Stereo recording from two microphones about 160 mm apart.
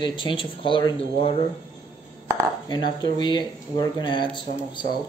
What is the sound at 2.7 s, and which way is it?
Speech, 25° left (ahead or behind).